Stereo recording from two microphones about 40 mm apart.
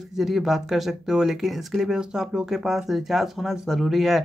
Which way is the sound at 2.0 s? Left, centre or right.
Centre.